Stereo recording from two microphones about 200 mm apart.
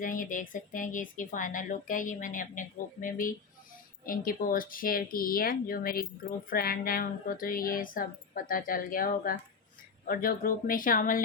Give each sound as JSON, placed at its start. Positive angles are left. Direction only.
{"t": 0.0, "sound": "speech", "side_deg": 40}